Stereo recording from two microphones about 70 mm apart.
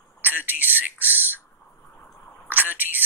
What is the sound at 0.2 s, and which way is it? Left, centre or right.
A man's voice, right.